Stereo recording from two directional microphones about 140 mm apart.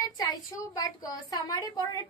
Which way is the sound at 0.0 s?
30° left (ahead or behind).